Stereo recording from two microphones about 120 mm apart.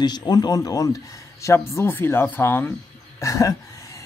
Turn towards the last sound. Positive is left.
turn(degrees=30)  # may be behind; listen again after turning